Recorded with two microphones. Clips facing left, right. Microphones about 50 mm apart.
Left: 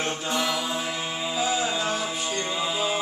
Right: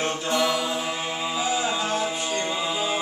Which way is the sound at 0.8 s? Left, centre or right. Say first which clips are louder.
Right 2 dB; centre.